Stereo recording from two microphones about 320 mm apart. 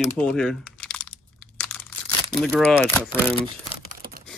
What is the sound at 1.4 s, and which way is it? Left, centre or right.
Crumpling, centre.